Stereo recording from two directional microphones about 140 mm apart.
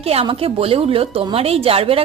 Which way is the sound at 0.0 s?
45° right (ahead or behind).